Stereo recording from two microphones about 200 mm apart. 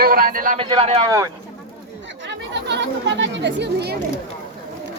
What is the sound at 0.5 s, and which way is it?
Speech, 25° right (ahead or behind).